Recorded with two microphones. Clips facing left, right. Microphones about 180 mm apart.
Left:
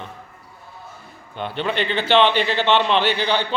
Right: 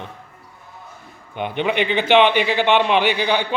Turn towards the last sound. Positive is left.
turn(degrees=-10)  # may be behind; listen again after turning